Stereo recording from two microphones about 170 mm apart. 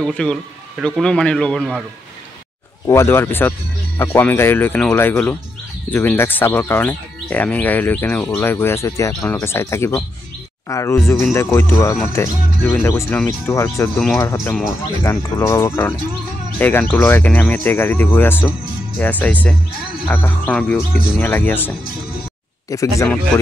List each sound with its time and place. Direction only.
0.0 s speech: 5° left (ahead or behind)
2.9 s speech: 15° left (ahead or behind)